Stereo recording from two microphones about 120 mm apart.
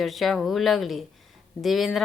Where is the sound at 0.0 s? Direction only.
Centre (ahead or behind).